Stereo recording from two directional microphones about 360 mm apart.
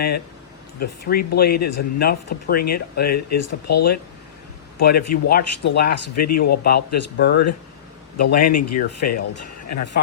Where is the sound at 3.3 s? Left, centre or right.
Left.